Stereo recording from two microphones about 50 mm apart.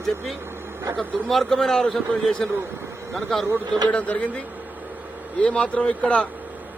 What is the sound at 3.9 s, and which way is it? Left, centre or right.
A man's voice, left.